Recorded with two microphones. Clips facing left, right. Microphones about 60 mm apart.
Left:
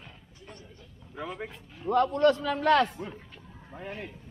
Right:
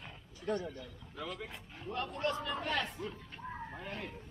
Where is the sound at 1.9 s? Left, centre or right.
Left.